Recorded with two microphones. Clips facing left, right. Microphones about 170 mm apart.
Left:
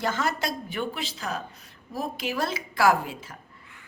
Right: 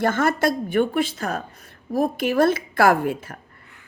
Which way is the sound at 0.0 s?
55° right (ahead or behind).